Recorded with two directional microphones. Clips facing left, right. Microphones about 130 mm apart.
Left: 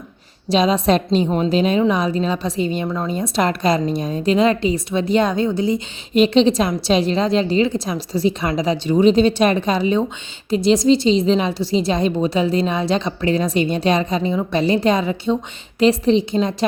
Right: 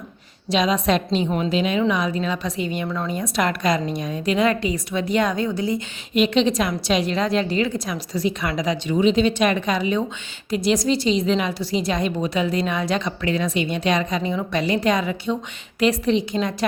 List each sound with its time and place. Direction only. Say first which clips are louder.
0.5 s a woman's voice: left 4 dB; 30° left (ahead or behind)